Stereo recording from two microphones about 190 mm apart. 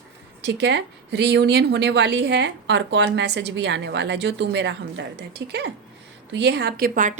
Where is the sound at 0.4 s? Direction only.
65° right (ahead or behind).